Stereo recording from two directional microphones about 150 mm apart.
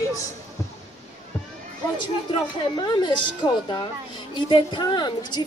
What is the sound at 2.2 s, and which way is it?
A woman's voice, 30° left (ahead or behind).